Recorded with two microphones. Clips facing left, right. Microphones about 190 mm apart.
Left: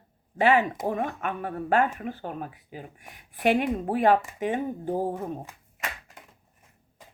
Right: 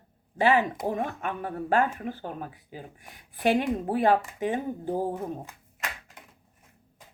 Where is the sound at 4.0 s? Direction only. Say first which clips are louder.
Left 2 dB; 35° right (ahead or behind).